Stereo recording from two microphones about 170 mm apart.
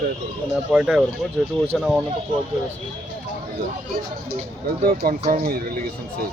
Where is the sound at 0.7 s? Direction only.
5° right (ahead or behind).